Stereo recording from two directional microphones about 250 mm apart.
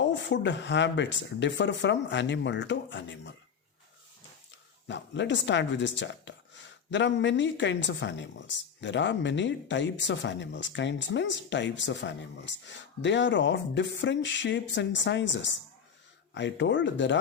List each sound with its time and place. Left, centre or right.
0.0 s speech: left
4.9 s speech: left